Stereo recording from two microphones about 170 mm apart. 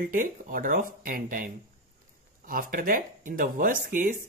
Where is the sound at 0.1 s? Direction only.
55° right (ahead or behind).